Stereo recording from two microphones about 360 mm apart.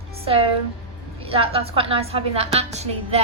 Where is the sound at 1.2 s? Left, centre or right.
Centre.